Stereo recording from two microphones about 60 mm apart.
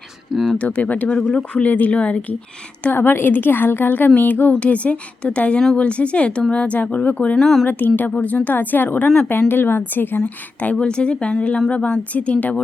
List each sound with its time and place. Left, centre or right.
0.6 s a woman's voice: left
2.9 s a woman's voice: left
7.3 s speech: centre
7.7 s a woman's voice: left